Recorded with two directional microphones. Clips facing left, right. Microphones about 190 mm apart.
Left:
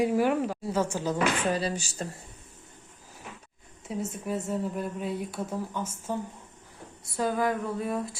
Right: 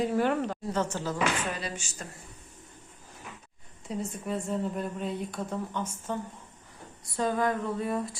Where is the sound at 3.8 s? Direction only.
Centre (ahead or behind).